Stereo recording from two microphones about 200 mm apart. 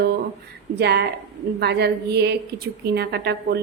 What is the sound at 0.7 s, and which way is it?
A woman's voice, 55° right (ahead or behind).